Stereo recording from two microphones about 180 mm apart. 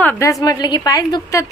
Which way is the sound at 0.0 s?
10° left (ahead or behind).